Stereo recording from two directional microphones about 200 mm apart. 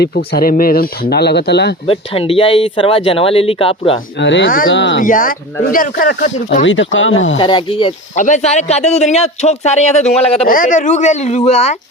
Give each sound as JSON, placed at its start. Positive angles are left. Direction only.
{"t": 0.3, "sound": "speech", "side_deg": 45}
{"t": 1.9, "sound": "speech", "side_deg": 30}
{"t": 4.2, "sound": "speech", "side_deg": 65}
{"t": 4.9, "sound": "speech", "side_deg": 40}
{"t": 6.7, "sound": "speech", "side_deg": 70}
{"t": 7.3, "sound": "speech", "side_deg": 25}
{"t": 8.1, "sound": "a man's voice", "side_deg": 35}
{"t": 10.4, "sound": "a man's voice", "side_deg": 45}